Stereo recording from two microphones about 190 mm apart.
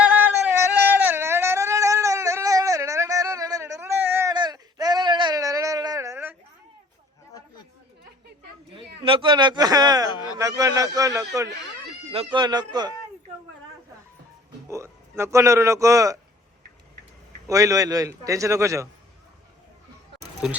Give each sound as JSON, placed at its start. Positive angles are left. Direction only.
{"t": 0.0, "sound": "yodeling", "side_deg": -10}
{"t": 0.9, "sound": "a sound", "side_deg": -10}
{"t": 9.0, "sound": "a man's voice", "side_deg": -25}
{"t": 12.1, "sound": "a man's voice", "side_deg": -25}
{"t": 14.7, "sound": "a man's voice", "side_deg": -15}
{"t": 17.5, "sound": "a man's voice", "side_deg": -15}
{"t": 20.4, "sound": "speech", "side_deg": -5}